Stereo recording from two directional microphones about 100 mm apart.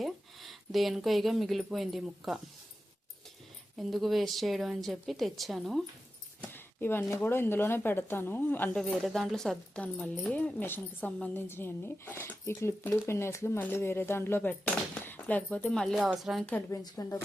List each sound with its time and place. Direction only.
0.0 s speech: centre (ahead or behind)
3.8 s a woman's voice: centre (ahead or behind)
6.4 s speech: 20° left (ahead or behind)
8.7 s a woman's voice: 5° left (ahead or behind)
16.5 s a woman's voice: 15° left (ahead or behind)
16.7 s speech: 35° left (ahead or behind)